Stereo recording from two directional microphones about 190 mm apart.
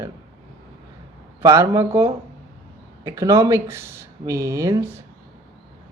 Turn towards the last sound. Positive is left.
turn(degrees=-15)  # may be behind; listen again after turning